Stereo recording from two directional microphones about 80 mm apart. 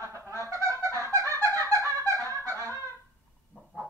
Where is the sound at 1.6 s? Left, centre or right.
Right.